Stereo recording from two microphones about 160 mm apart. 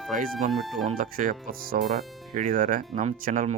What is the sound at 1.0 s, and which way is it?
Speech, 60° right (ahead or behind).